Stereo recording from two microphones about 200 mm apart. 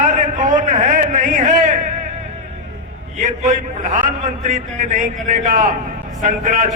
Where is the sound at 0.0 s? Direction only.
40° right (ahead or behind).